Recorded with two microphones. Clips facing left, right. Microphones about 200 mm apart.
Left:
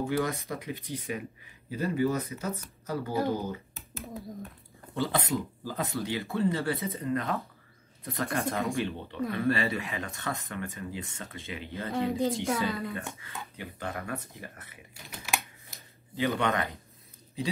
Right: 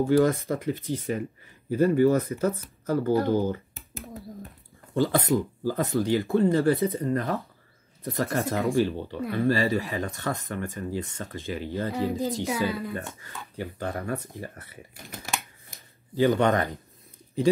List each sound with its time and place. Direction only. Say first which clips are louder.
0.0 s speech: right 9 dB; 45° right (ahead or behind)
4.9 s speech: right 6 dB; 45° right (ahead or behind)
8.7 s speech: right 7 dB; 35° right (ahead or behind)
11.9 s speech: left 2 dB; 5° right (ahead or behind)
13.2 s speech: right 5 dB; 40° right (ahead or behind)
15.0 s speech: right 4 dB; 50° right (ahead or behind)
15.7 s a sound: right 6 dB; 50° right (ahead or behind)